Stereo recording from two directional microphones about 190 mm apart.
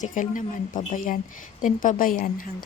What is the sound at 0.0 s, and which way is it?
A woman's voice, 45° left (ahead or behind).